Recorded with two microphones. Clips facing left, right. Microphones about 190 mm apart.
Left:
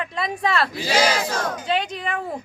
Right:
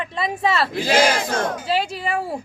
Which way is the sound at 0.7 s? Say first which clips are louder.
Right 3 dB; 55° right (ahead or behind).